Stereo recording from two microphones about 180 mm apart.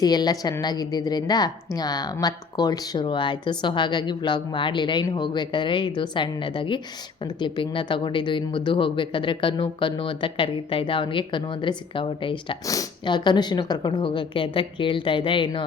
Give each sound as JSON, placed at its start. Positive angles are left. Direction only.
{"t": 0.0, "sound": "a woman's voice", "side_deg": 20}